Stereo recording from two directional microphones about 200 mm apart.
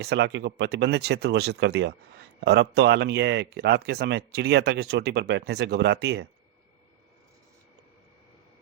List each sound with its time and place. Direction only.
0.0 s speech: 55° right (ahead or behind)